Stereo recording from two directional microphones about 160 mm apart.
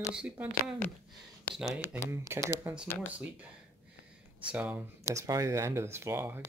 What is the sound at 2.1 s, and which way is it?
Speech, 15° right (ahead or behind).